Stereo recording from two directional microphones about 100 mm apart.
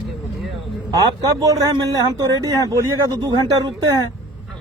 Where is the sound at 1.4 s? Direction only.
35° right (ahead or behind).